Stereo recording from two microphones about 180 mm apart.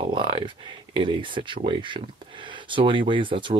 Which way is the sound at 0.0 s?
30° right (ahead or behind).